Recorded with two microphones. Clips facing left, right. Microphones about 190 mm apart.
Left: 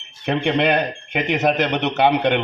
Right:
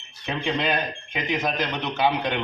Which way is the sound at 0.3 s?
70° left (ahead or behind).